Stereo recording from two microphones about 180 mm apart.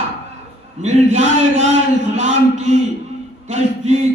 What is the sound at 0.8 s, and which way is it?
A man's voice, 40° right (ahead or behind).